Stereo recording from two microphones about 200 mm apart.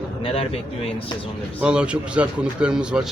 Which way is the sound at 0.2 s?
30° left (ahead or behind).